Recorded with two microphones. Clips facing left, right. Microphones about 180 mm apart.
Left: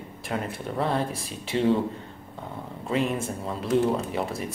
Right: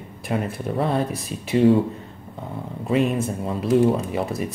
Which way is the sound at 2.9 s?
20° right (ahead or behind).